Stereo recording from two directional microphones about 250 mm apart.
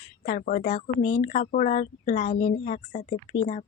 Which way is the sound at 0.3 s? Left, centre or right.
Left.